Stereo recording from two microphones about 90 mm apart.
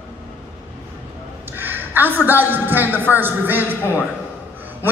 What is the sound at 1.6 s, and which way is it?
A man's voice, 20° right (ahead or behind).